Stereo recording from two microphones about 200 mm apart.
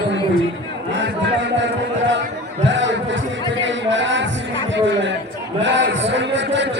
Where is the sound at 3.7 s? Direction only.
65° right (ahead or behind).